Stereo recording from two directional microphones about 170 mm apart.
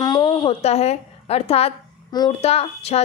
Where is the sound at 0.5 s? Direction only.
40° left (ahead or behind).